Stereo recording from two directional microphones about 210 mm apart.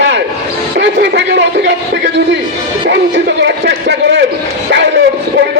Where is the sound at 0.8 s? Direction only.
55° right (ahead or behind).